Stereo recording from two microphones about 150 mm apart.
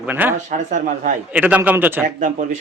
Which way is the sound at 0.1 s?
10° right (ahead or behind).